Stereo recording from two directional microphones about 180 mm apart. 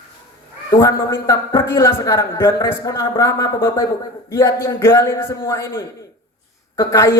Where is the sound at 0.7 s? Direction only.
15° left (ahead or behind).